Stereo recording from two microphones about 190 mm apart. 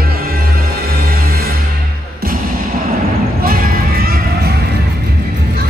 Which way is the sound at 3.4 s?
50° right (ahead or behind).